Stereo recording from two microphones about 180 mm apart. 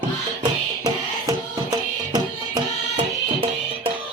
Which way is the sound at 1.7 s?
20° right (ahead or behind).